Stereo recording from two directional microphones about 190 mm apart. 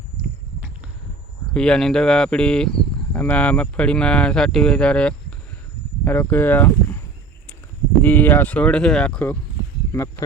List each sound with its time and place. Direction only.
1.5 s speech: 5° left (ahead or behind)
8.0 s speech: 10° left (ahead or behind)